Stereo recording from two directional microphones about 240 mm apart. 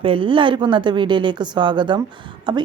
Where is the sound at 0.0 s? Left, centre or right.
Right.